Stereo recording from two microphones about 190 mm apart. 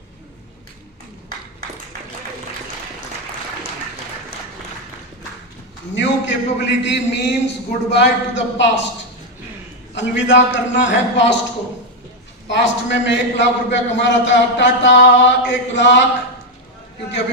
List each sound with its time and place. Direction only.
5.9 s a man's voice: 70° left (ahead or behind)
9.9 s a man's voice: 70° left (ahead or behind)
12.5 s a man's voice: 70° left (ahead or behind)